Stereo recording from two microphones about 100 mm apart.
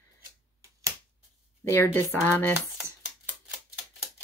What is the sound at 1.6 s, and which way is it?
Speech, 25° left (ahead or behind).